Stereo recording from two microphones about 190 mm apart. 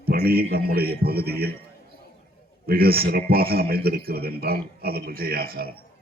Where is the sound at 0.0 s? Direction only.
55° right (ahead or behind).